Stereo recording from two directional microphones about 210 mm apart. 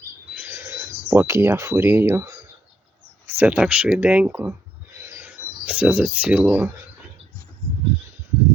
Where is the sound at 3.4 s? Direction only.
5° right (ahead or behind).